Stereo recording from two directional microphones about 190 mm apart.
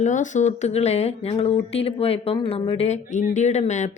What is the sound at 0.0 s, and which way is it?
Speech, 40° left (ahead or behind).